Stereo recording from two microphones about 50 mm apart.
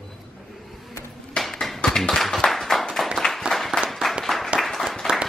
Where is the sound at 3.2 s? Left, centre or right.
Centre.